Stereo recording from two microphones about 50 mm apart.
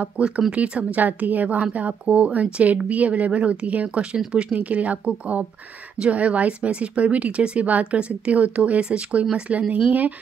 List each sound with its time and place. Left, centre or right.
0.5 s a woman's voice: right